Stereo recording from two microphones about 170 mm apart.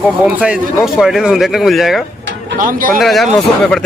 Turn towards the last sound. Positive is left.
turn(degrees=0)  # may be behind; listen again after turning